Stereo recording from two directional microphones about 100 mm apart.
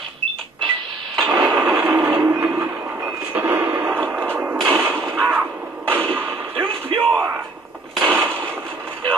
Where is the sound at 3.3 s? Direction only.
20° right (ahead or behind).